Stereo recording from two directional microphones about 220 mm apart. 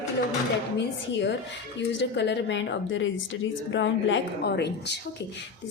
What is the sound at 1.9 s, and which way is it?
A woman's voice, 55° left (ahead or behind).